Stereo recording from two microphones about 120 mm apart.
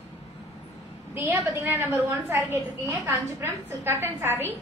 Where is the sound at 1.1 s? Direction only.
25° right (ahead or behind).